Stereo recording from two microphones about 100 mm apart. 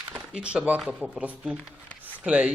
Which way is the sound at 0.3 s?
10° right (ahead or behind).